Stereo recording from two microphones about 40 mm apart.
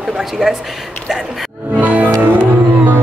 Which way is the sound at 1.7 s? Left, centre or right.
Right.